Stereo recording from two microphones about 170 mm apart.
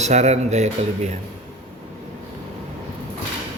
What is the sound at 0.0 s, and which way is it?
Speech, 40° right (ahead or behind).